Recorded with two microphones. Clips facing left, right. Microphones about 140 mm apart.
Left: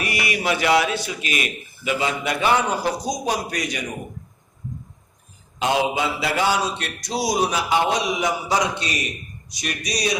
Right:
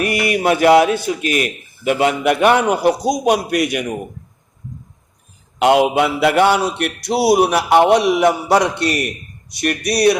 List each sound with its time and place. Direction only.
0.0 s a man's voice: 50° right (ahead or behind)
5.5 s a man's voice: 70° right (ahead or behind)